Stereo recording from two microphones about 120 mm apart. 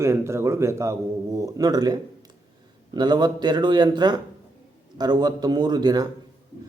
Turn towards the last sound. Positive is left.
turn(degrees=-35)  # may be behind; listen again after turning